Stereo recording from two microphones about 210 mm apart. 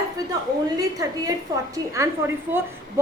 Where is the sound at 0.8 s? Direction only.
15° right (ahead or behind).